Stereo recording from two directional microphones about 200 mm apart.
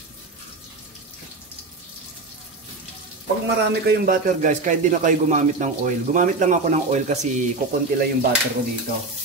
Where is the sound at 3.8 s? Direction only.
40° right (ahead or behind).